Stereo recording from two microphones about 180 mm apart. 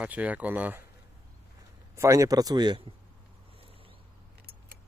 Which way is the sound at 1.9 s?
15° right (ahead or behind).